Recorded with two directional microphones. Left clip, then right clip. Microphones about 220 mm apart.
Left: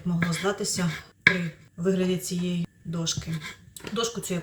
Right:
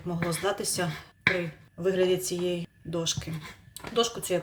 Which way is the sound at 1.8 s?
45° right (ahead or behind).